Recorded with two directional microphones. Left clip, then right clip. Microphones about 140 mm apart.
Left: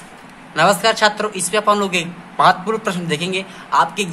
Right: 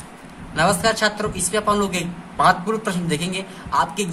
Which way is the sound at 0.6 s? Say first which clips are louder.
Left 4 dB; 10° left (ahead or behind).